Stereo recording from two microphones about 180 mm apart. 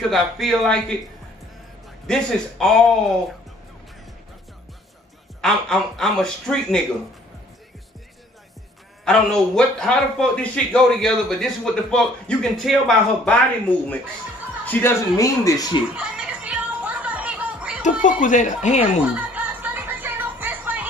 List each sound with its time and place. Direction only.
0.1 s a man's voice: centre (ahead or behind)
2.0 s a man's voice: 5° left (ahead or behind)
5.4 s a man's voice: 5° left (ahead or behind)
9.0 s a man's voice: 5° left (ahead or behind); by 15.8 s 20° left (ahead or behind)
15.9 s music: 5° right (ahead or behind)
18.0 s speech: 45° left (ahead or behind)
19.1 s music: 10° right (ahead or behind)